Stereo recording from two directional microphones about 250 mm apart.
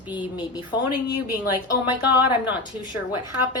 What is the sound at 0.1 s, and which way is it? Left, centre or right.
Speech, centre.